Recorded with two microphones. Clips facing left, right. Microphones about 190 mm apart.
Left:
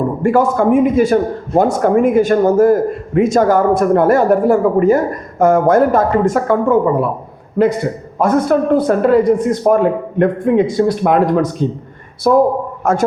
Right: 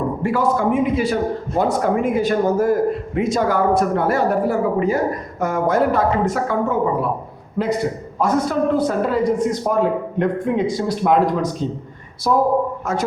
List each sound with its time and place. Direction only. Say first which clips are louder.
0.2 s a man's voice: left 7 dB; 50° left (ahead or behind)